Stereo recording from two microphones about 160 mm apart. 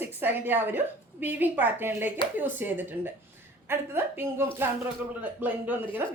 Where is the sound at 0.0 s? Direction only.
10° right (ahead or behind).